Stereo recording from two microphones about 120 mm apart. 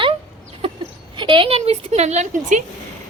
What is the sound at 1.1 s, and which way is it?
Speech, 40° right (ahead or behind).